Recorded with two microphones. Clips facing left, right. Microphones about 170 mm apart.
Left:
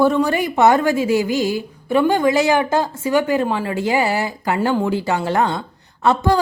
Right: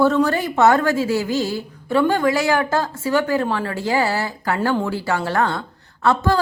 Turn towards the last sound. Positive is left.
turn(degrees=15)  # may be behind; listen again after turning